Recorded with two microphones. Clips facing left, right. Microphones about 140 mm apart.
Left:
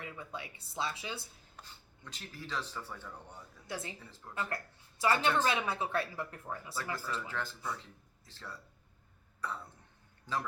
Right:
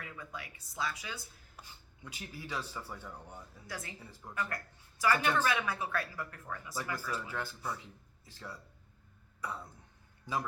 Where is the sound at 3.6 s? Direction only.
25° left (ahead or behind).